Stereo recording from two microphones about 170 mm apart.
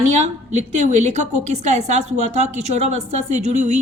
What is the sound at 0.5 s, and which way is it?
A woman's voice, 40° right (ahead or behind).